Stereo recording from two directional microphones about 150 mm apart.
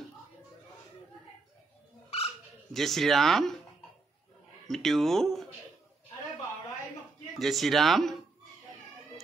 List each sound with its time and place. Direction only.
2.0 s dog: 40° left (ahead or behind)
2.7 s speech: centre (ahead or behind)
4.6 s speech: centre (ahead or behind)
7.3 s speech: centre (ahead or behind)